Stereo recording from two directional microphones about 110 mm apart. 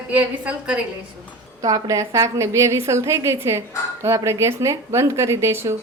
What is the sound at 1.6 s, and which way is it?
A woman's voice, 30° right (ahead or behind).